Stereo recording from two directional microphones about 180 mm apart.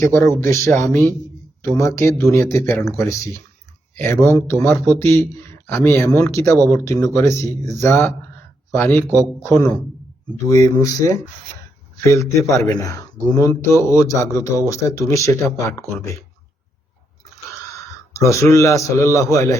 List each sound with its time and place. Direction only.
0.1 s speech: 15° left (ahead or behind)
18.1 s speech: 15° left (ahead or behind)